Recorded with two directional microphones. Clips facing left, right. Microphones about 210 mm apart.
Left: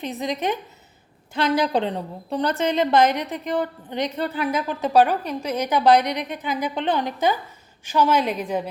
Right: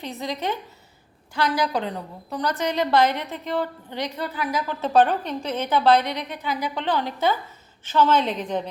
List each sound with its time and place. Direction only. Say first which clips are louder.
0.0 s a woman's voice: left 3 dB; 20° left (ahead or behind)